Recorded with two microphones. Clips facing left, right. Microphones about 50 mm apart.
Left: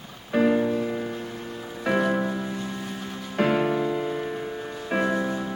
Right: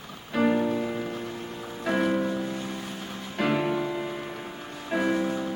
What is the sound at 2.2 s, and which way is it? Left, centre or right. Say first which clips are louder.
Music: even; centre.